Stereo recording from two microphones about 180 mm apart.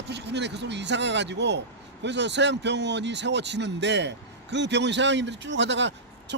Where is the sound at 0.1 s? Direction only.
70° right (ahead or behind).